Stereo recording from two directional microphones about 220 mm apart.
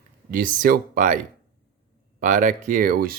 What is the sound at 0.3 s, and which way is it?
Speech, 40° right (ahead or behind).